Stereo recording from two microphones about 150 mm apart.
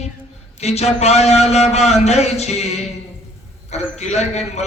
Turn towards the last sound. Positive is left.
turn(degrees=45)  # may be behind; listen again after turning